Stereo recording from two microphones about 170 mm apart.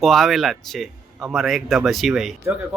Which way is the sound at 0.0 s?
Centre (ahead or behind).